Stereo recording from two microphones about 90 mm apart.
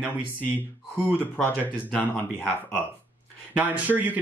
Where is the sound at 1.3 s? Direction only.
15° left (ahead or behind).